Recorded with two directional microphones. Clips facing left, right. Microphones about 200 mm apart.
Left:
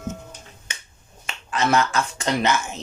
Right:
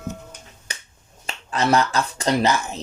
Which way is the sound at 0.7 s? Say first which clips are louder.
Right 2 dB; 40° right (ahead or behind).